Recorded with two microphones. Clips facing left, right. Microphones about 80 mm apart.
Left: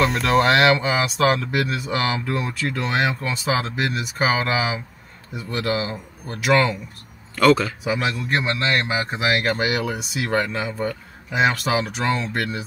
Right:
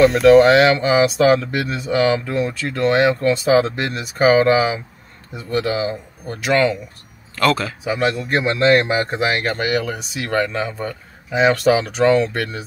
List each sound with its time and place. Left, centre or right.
0.0 s speech: centre